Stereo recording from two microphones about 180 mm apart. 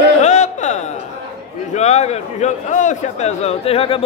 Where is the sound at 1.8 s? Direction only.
40° left (ahead or behind).